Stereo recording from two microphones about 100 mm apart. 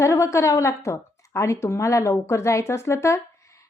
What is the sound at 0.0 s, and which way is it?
A woman's voice, 30° left (ahead or behind).